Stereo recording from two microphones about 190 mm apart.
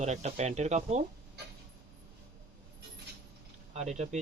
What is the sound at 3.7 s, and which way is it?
Speech, 35° right (ahead or behind).